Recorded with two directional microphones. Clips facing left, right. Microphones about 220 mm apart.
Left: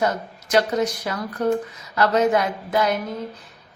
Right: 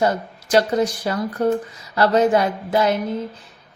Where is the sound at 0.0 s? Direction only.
30° right (ahead or behind).